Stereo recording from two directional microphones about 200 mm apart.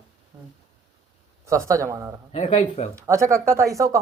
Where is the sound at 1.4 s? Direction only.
15° right (ahead or behind).